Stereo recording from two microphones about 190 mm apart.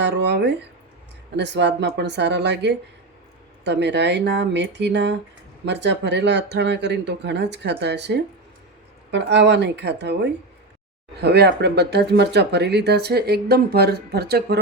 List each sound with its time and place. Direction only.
0.0 s speech: 65° right (ahead or behind)
11.2 s speech: 60° right (ahead or behind)